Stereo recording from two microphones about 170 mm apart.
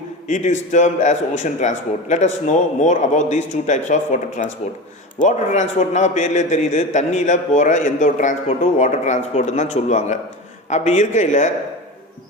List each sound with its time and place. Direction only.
0.3 s a man's voice: 45° left (ahead or behind)